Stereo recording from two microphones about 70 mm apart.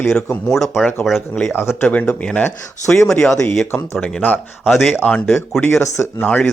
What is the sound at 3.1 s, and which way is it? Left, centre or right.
Speech, centre.